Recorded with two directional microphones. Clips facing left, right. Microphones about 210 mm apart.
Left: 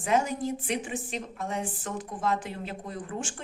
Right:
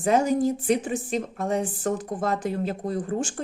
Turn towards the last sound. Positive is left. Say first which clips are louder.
# right 8 dB
turn(degrees=-35)  # may be behind; listen again after turning